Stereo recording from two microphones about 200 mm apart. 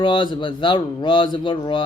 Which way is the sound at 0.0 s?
25° left (ahead or behind).